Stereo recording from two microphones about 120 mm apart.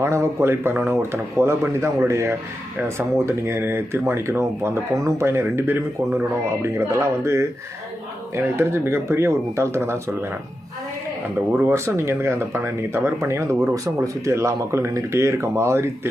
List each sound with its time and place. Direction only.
0.0 s speech: 20° right (ahead or behind)
8.5 s speech: 20° right (ahead or behind)
11.7 s speech: 20° right (ahead or behind)